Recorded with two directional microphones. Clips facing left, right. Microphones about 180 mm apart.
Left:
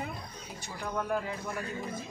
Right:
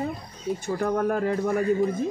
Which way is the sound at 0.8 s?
55° right (ahead or behind).